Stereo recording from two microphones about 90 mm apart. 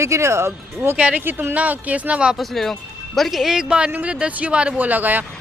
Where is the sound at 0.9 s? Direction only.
15° right (ahead or behind).